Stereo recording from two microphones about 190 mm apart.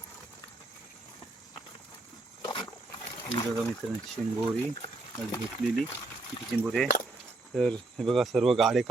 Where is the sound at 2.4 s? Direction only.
25° left (ahead or behind).